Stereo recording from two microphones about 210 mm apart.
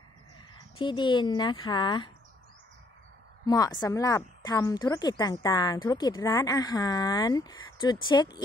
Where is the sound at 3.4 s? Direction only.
15° left (ahead or behind).